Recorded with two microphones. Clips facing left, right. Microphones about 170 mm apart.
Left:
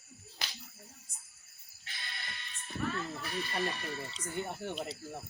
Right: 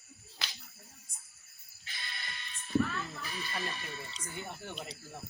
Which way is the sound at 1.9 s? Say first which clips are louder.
Even; 70° left (ahead or behind).